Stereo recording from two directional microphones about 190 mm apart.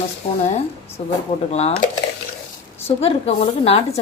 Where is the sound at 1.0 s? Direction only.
35° left (ahead or behind).